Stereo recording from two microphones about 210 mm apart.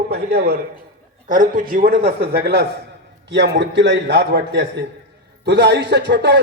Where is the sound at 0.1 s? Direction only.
50° right (ahead or behind).